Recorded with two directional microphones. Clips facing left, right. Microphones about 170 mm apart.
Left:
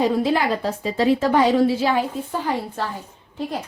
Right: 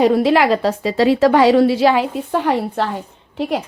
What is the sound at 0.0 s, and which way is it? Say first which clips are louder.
A woman's voice: right 6 dB; 75° right (ahead or behind).